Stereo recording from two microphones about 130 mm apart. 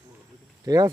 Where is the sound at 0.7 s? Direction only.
25° right (ahead or behind).